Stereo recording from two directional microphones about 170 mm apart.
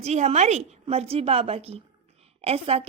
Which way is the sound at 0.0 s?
40° right (ahead or behind).